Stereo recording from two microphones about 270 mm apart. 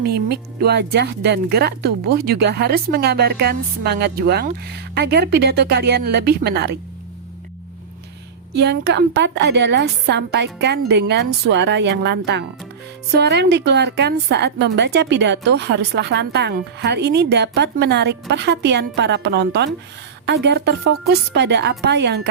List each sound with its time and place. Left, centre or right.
0.0 s speech: right
8.5 s speech: right